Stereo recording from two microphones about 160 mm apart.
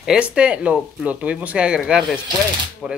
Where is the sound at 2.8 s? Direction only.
5° right (ahead or behind).